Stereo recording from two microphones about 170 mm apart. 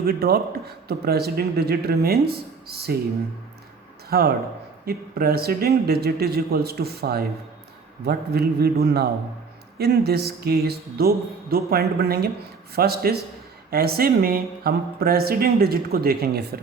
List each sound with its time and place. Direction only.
0.0 s speech: 65° right (ahead or behind)
4.1 s speech: 65° right (ahead or behind)